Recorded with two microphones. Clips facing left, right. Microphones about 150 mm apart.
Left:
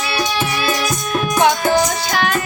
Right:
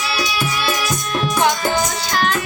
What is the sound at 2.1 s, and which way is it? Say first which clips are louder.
Music: left 1 dB; 65° left (ahead or behind).